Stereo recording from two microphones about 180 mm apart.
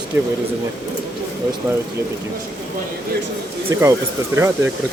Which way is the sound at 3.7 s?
15° right (ahead or behind).